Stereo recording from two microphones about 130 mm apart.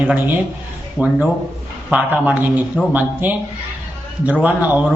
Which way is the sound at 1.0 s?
10° right (ahead or behind).